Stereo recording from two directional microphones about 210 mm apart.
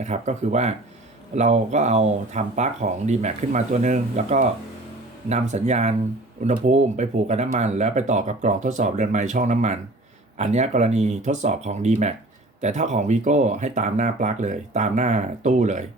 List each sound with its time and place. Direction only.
0.0 s speech: 35° right (ahead or behind)